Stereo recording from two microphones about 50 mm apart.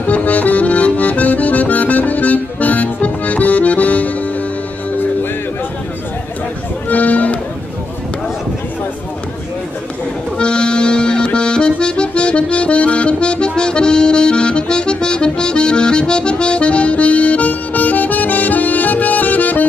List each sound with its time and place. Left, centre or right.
0.0 s accordion: left
6.9 s music: left
10.3 s accordion: centre; by 19.7 s left